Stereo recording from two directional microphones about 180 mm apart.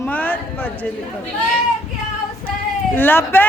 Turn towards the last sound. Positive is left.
turn(degrees=10)  # may be behind; listen again after turning